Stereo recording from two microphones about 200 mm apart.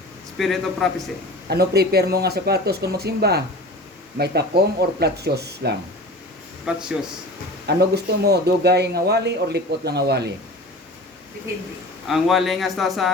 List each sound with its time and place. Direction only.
0.3 s speech: centre (ahead or behind)
1.5 s speech: 50° right (ahead or behind)
6.7 s speech: 5° right (ahead or behind)
7.7 s speech: 55° right (ahead or behind)
12.0 s speech: centre (ahead or behind)